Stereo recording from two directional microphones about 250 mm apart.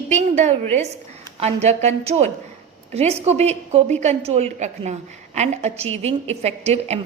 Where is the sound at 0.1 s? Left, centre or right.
Right.